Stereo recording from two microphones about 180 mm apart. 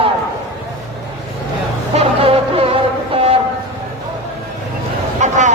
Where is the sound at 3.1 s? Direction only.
30° right (ahead or behind).